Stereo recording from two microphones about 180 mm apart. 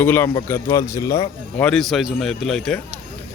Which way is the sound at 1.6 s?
Centre (ahead or behind).